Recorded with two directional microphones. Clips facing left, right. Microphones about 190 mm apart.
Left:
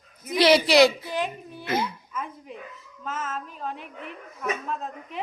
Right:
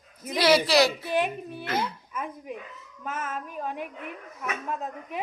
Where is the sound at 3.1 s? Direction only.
15° right (ahead or behind).